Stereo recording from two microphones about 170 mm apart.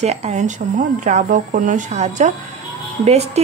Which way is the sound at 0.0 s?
40° right (ahead or behind).